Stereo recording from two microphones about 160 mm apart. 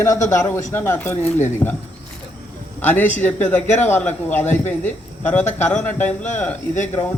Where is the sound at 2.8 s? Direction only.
10° left (ahead or behind).